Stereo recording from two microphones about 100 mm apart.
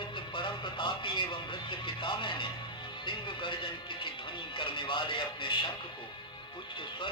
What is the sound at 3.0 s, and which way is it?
Speech, 55° left (ahead or behind).